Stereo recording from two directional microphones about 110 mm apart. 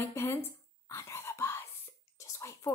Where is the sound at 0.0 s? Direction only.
25° left (ahead or behind).